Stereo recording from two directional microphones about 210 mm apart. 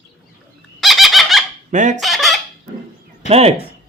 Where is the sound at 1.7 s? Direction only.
35° right (ahead or behind).